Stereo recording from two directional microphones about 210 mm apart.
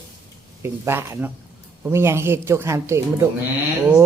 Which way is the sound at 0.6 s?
10° right (ahead or behind).